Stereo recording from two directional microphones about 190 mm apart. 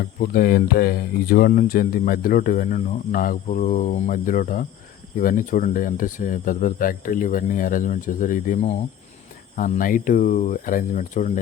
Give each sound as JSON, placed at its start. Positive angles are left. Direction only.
{"t": 0.0, "sound": "speech", "side_deg": 55}